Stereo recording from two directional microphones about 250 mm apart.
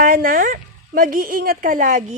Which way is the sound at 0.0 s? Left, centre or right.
Right.